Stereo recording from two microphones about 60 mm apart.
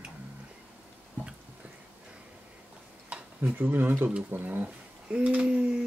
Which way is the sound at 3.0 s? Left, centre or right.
Right.